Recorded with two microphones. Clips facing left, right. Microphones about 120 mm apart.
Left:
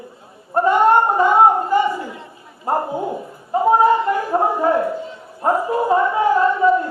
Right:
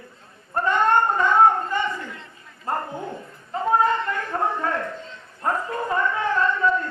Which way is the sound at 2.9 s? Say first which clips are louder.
Left 8 dB; 10° left (ahead or behind).